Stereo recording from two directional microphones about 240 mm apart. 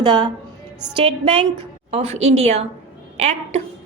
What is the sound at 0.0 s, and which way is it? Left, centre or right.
A woman's voice, centre.